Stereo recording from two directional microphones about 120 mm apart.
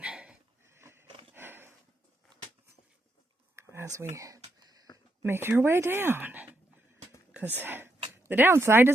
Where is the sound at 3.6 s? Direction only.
20° right (ahead or behind).